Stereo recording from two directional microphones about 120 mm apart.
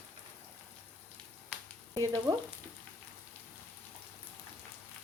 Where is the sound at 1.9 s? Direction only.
30° right (ahead or behind).